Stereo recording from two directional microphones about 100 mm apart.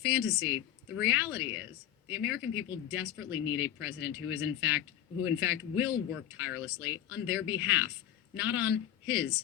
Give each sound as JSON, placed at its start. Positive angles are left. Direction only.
{"t": 0.0, "sound": "speech", "side_deg": -30}